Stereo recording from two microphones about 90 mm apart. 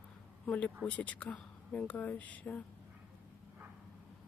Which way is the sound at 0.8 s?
15° left (ahead or behind).